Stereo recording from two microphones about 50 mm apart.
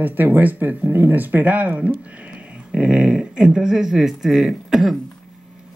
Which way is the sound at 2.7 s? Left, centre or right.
Centre.